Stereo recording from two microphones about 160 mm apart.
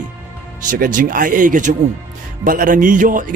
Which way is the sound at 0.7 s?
55° right (ahead or behind).